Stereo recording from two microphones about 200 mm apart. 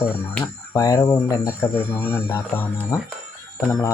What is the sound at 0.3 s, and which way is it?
Speech, 15° left (ahead or behind).